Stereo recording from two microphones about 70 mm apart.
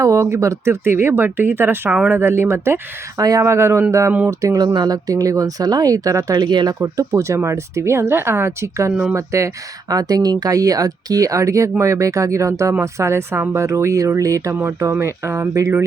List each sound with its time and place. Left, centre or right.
0.0 s speech: right
3.2 s speech: right
3.4 s speech: right
4.3 s speech: right
4.6 s speech: right
6.9 s speech: right
8.9 s speech: centre
9.1 s speech: right
9.9 s speech: right
14.5 s speech: right
14.8 s speech: right